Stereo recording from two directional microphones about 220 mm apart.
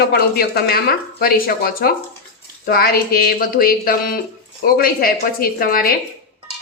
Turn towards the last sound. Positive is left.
turn(degrees=40)  # may be behind; listen again after turning